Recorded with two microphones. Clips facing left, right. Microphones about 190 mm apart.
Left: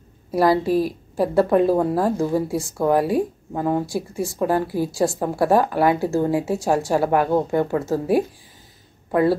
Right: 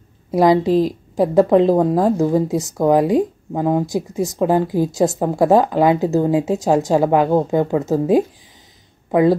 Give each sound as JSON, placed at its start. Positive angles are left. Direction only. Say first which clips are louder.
{"t": 0.3, "sound": "a woman's voice", "louder": "right 4 dB", "side_deg": -20}